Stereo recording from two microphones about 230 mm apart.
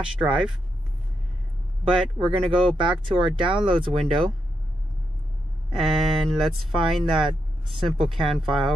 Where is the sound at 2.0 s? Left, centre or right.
Centre.